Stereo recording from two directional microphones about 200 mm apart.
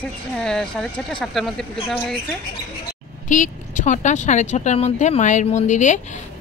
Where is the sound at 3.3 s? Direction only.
40° left (ahead or behind).